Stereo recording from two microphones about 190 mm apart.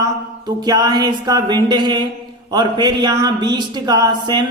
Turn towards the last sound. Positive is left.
turn(degrees=-20)  # may be behind; listen again after turning